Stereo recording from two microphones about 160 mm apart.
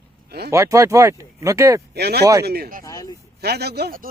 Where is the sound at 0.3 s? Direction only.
90° right.